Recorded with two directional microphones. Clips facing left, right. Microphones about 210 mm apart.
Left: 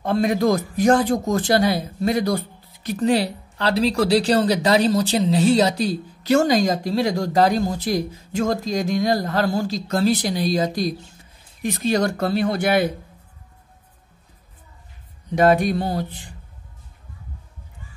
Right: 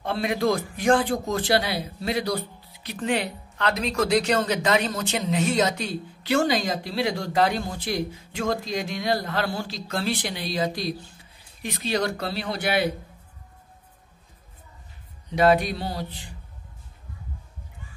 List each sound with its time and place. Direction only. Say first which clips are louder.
0.0 s a man's voice: left 5 dB; 45° left (ahead or behind)
15.3 s speech: left 3 dB; 45° left (ahead or behind)